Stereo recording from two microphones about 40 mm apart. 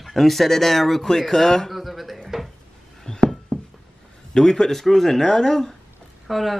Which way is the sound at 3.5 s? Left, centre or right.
Centre.